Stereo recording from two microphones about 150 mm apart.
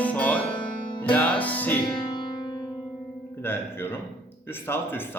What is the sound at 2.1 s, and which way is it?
Music, 30° left (ahead or behind).